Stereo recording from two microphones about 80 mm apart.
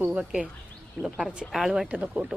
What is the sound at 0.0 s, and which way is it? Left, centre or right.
Speech, centre.